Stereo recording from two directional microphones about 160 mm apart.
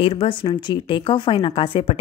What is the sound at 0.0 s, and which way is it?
Speech, 35° left (ahead or behind).